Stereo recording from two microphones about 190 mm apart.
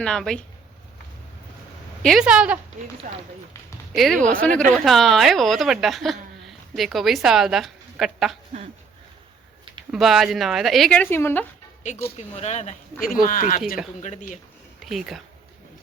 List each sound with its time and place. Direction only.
0.0 s a woman's voice: 5° left (ahead or behind)
2.0 s a woman's voice: centre (ahead or behind)
3.1 s speech: 40° right (ahead or behind)
3.9 s a woman's voice: centre (ahead or behind)
9.9 s a woman's voice: centre (ahead or behind)
12.1 s speech: 35° left (ahead or behind)
14.8 s a woman's voice: centre (ahead or behind)